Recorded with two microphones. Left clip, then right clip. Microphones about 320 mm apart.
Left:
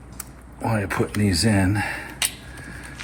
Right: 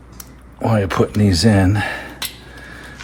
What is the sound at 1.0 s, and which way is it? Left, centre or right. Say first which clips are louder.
Speech: right 6 dB; right.